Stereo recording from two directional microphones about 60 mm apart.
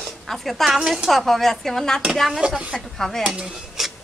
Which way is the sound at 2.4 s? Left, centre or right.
Centre.